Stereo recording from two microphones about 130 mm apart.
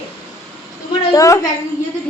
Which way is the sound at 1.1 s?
25° left (ahead or behind).